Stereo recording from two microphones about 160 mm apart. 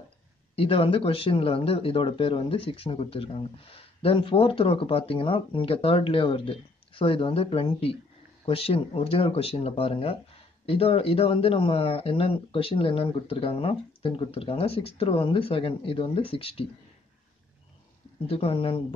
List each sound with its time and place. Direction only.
0.6 s speech: 35° left (ahead or behind)
18.2 s speech: 35° left (ahead or behind)